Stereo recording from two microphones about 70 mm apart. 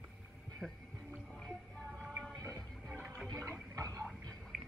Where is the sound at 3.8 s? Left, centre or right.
Right.